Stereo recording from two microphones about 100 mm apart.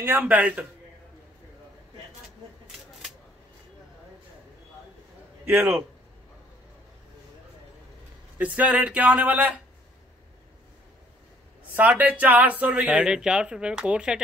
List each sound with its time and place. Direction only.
0.0 s speech: 20° right (ahead or behind)
5.4 s a man's voice: 20° right (ahead or behind)
8.4 s speech: 15° right (ahead or behind)
11.7 s speech: 15° right (ahead or behind)